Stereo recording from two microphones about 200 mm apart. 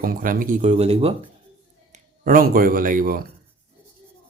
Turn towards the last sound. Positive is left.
turn(degrees=-45)  # may be behind; listen again after turning